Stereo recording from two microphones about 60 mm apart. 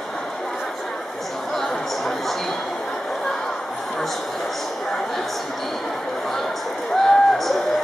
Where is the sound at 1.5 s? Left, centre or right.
Centre.